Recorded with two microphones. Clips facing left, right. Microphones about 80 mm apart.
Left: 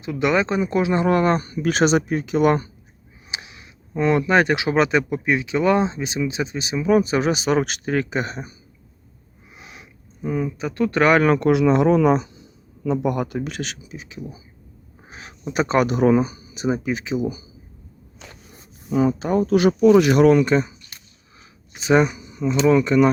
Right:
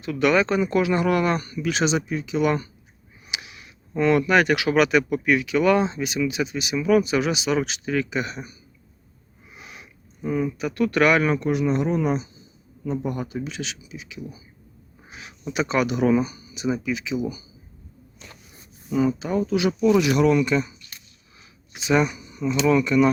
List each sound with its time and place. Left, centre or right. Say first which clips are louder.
0.0 s speech: even; left
3.2 s speech: left 1 dB; left
9.6 s a sound: even; left
10.6 s speech: left 2 dB; left
11.3 s a man's voice: left 6 dB; left
18.9 s speech: left 3 dB; left
21.8 s speech: left 4 dB; left
22.0 s speech: left 3 dB; left